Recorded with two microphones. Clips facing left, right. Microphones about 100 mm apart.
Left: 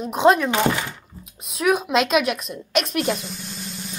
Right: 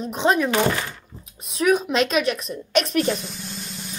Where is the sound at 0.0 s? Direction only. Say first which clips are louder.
Left 4 dB; centre (ahead or behind).